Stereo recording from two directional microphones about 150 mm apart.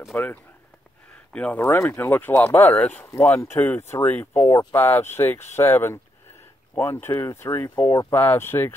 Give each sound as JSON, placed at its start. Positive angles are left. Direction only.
{"t": 0.1, "sound": "speech", "side_deg": 10}